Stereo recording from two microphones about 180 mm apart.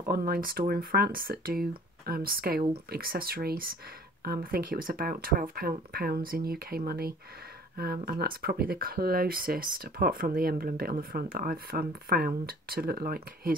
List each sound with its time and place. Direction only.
0.0 s speech: 55° right (ahead or behind)